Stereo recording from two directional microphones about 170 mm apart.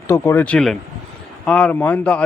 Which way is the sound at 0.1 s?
10° left (ahead or behind).